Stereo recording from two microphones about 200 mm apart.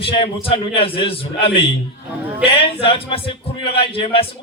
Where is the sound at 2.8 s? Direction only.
25° left (ahead or behind).